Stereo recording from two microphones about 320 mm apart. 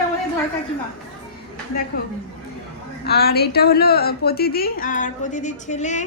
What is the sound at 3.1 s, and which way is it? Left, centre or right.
A woman's voice, left.